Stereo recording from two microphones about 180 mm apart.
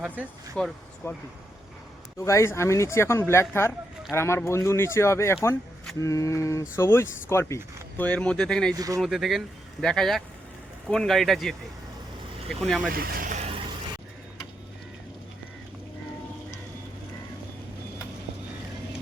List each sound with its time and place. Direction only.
0.0 s speech: centre (ahead or behind)
2.1 s speech: 15° left (ahead or behind)
8.7 s speech: 20° right (ahead or behind)
9.0 s speech: centre (ahead or behind)
12.9 s speech: 55° right (ahead or behind)